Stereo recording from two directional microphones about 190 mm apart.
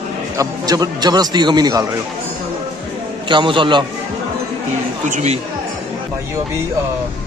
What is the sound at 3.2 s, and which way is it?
Speech, 25° right (ahead or behind).